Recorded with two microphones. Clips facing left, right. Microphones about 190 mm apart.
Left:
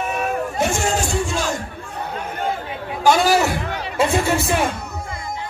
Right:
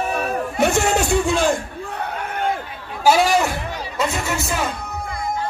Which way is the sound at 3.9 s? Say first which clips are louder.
Left 5 dB; 30° left (ahead or behind).